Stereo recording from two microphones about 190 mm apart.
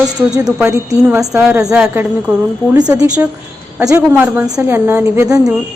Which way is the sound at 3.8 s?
10° right (ahead or behind).